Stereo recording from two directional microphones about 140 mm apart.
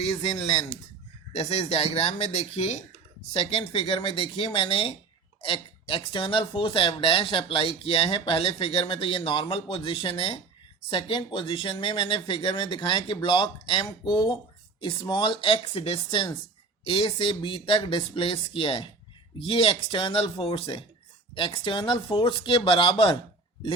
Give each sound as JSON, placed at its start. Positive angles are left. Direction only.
{"t": 0.0, "sound": "speech", "side_deg": 45}